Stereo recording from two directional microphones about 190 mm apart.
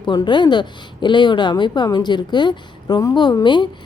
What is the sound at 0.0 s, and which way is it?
A woman's voice, 25° left (ahead or behind).